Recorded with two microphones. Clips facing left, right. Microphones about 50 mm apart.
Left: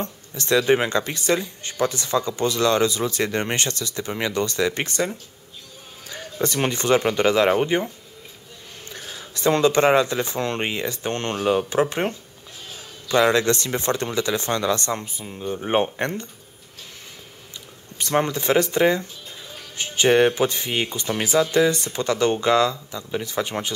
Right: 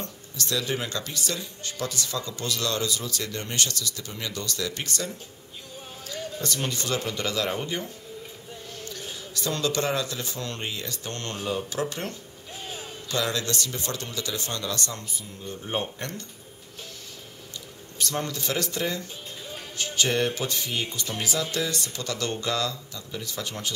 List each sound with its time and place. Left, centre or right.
0.0 s a man's voice: left
18.1 s speech: left